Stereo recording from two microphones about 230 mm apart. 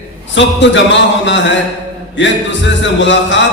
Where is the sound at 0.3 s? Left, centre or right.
Left.